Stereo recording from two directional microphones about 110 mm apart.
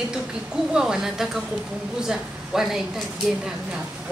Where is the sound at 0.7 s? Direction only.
5° right (ahead or behind).